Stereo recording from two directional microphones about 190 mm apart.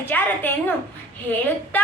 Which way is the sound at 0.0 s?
10° left (ahead or behind).